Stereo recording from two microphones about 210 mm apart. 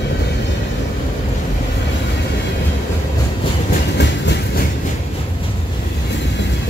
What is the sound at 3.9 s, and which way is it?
Train, 55° left (ahead or behind).